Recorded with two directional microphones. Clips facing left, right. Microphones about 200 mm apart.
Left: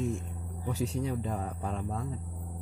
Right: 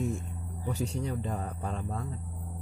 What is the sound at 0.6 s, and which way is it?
Speech, 5° left (ahead or behind).